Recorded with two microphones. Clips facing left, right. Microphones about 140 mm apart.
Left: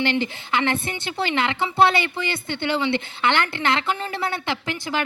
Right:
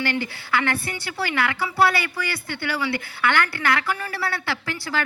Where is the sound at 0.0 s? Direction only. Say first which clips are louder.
Left 3 dB; 20° left (ahead or behind).